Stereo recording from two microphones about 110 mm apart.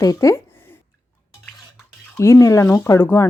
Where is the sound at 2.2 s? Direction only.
30° left (ahead or behind).